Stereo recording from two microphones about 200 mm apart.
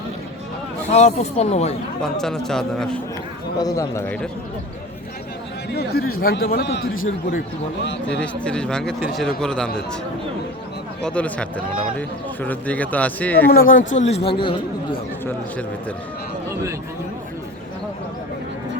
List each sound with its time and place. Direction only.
0.9 s speech: 35° left (ahead or behind)
2.0 s speech: centre (ahead or behind)
3.6 s speech: 15° left (ahead or behind)
5.7 s a man's voice: 50° left (ahead or behind)
8.2 s speech: 5° left (ahead or behind)
11.0 s speech: 5° left (ahead or behind)
13.5 s speech: 45° left (ahead or behind); by 15.0 s 25° left (ahead or behind)